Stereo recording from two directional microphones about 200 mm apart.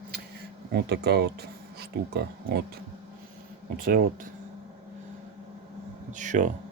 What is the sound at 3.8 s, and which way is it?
Speech, 45° right (ahead or behind).